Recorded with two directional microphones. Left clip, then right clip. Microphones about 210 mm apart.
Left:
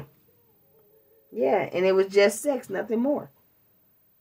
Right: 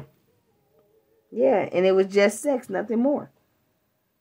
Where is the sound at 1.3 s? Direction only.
50° right (ahead or behind).